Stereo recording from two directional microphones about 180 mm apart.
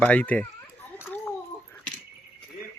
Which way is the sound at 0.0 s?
10° left (ahead or behind).